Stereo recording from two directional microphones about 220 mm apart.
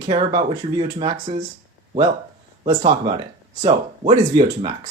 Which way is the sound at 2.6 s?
25° right (ahead or behind).